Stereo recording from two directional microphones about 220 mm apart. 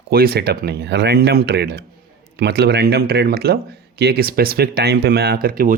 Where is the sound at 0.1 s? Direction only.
45° right (ahead or behind).